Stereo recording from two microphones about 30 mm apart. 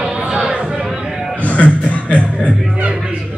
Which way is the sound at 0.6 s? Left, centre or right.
Right.